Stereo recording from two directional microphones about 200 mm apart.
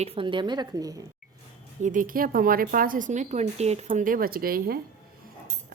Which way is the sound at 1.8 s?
40° right (ahead or behind).